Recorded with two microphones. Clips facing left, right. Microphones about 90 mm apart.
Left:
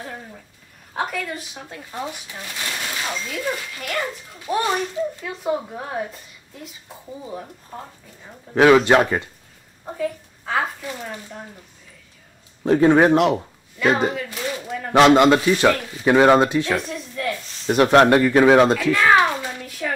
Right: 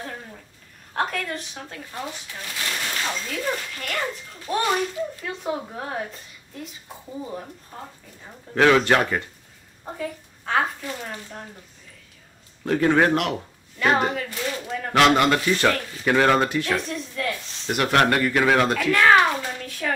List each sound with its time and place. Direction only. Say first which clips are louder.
0.9 s speech: even; 5° left (ahead or behind)
3.0 s speech: left 1 dB; 5° left (ahead or behind)
8.5 s speech: left 4 dB; 15° left (ahead or behind)
9.8 s speech: left 5 dB; centre (ahead or behind)
12.6 s speech: left 5 dB; 20° left (ahead or behind)
14.0 s speech: left 2 dB; 5° left (ahead or behind)
16.7 s a woman's voice: left 1 dB; centre (ahead or behind)
17.6 s speech: left 6 dB; 25° left (ahead or behind)
18.8 s a child's voice: left 1 dB; 5° left (ahead or behind)